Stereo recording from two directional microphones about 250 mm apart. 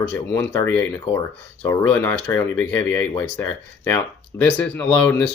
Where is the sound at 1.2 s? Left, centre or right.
Centre.